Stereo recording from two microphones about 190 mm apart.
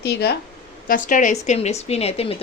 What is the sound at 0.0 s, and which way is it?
Speech, 55° left (ahead or behind).